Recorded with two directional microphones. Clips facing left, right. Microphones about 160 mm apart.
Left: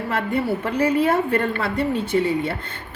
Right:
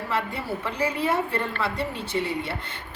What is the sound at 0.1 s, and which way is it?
A woman's voice, 55° left (ahead or behind).